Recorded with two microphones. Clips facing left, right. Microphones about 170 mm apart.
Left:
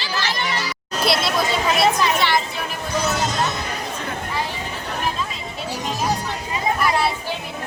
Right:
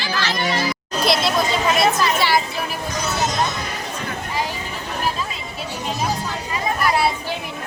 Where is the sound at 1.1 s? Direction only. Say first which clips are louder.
Right 1 dB; centre (ahead or behind).